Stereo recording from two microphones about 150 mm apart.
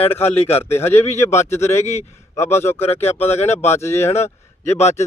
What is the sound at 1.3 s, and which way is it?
Speech, 45° left (ahead or behind).